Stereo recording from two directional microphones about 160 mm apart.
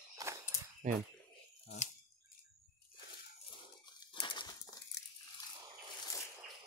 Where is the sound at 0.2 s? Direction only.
20° right (ahead or behind).